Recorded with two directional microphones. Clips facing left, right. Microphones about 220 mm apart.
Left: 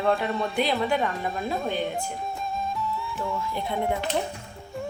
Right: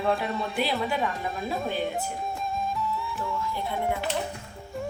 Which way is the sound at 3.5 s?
20° left (ahead or behind).